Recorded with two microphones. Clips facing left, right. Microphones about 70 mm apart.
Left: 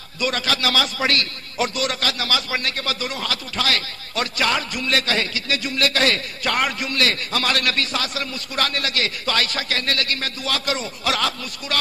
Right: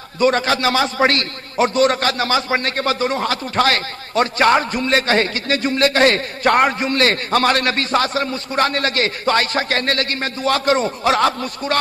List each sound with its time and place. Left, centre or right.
0.2 s a man's voice: right